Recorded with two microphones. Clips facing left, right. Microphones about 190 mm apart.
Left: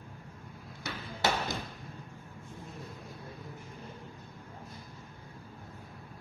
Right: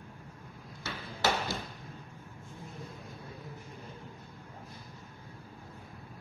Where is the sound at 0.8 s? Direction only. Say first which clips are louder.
Even; 15° left (ahead or behind).